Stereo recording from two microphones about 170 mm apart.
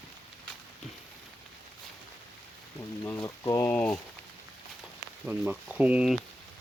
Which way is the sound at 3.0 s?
20° left (ahead or behind).